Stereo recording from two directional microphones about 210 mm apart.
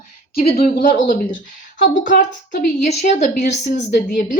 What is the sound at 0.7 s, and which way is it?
A woman's voice, 40° left (ahead or behind).